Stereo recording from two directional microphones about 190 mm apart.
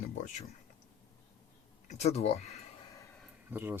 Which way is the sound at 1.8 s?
35° left (ahead or behind).